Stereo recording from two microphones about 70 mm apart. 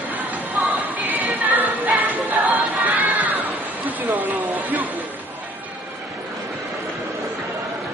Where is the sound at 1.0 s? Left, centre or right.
Right.